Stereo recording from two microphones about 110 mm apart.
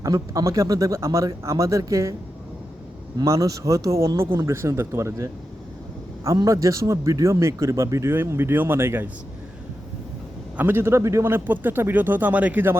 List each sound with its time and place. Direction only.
0.0 s a man's voice: 30° right (ahead or behind)
3.2 s a man's voice: 30° right (ahead or behind)
10.6 s a man's voice: 20° right (ahead or behind)